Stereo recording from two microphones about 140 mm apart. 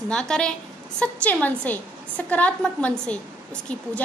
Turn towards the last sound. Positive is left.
turn(degrees=5)  # may be behind; listen again after turning